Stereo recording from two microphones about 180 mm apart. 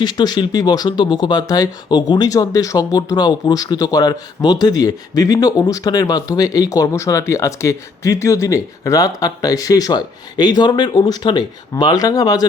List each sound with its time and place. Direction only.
0.0 s speech: 25° left (ahead or behind)